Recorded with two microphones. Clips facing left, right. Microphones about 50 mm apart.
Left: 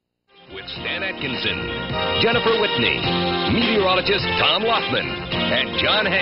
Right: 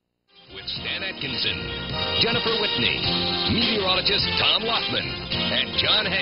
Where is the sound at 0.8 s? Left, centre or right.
Left.